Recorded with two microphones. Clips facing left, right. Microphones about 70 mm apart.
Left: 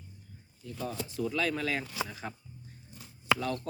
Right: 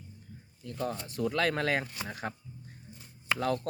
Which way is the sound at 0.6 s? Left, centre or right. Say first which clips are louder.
Right 2 dB; right.